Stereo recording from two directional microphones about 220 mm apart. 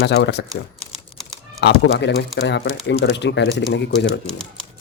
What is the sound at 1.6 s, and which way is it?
A man's voice, 50° left (ahead or behind).